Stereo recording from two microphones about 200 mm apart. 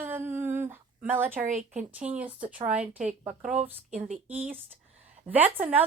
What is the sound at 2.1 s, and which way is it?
Speech, 5° right (ahead or behind).